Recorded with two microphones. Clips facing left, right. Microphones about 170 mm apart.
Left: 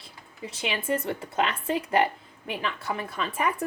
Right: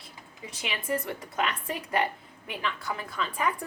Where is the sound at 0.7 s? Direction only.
25° left (ahead or behind).